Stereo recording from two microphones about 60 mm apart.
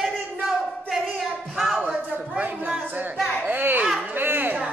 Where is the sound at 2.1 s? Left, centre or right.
Right.